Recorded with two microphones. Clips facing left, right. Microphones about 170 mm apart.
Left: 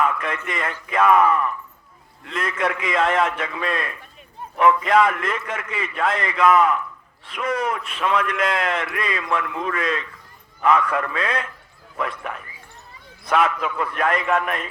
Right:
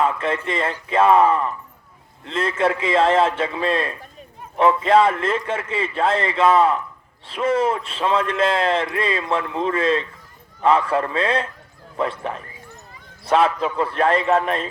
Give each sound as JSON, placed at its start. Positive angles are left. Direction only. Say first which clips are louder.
{"t": 0.0, "sound": "a man's voice", "louder": "right 2 dB", "side_deg": -30}